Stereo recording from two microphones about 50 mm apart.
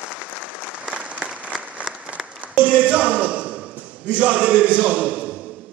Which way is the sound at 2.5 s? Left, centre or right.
Right.